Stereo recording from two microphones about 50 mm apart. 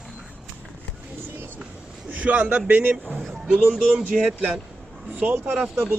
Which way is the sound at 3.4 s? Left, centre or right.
Right.